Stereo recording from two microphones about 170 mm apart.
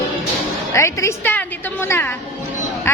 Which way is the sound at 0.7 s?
15° left (ahead or behind).